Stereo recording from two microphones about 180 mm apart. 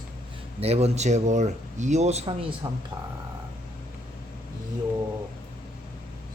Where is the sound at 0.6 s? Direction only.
35° right (ahead or behind).